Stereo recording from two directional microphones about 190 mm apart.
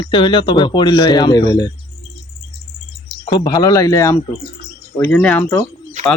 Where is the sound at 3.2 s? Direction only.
20° left (ahead or behind).